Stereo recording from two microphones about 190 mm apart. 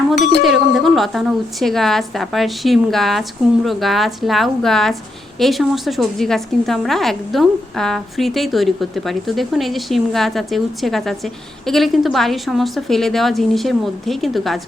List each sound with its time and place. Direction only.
0.2 s speech: 65° left (ahead or behind)
0.4 s a woman's voice: centre (ahead or behind)